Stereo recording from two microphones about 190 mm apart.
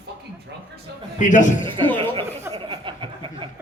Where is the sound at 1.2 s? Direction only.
40° left (ahead or behind).